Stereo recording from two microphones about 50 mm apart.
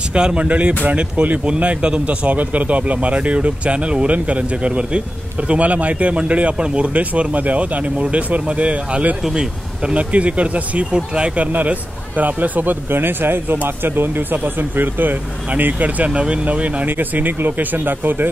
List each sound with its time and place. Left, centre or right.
0.1 s speech: centre
9.9 s speech: right
12.9 s speech: right
16.1 s speech: right
16.8 s speech: right